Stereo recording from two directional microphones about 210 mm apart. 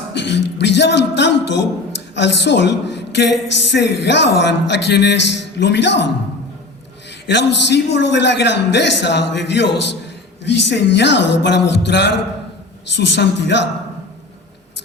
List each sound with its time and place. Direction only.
0.1 s a woman's voice: 55° left (ahead or behind)
7.3 s a woman's voice: 55° left (ahead or behind)